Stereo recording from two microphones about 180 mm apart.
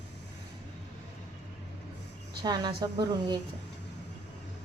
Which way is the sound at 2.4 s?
25° right (ahead or behind).